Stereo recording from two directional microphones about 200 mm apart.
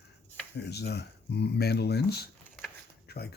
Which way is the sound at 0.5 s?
55° left (ahead or behind).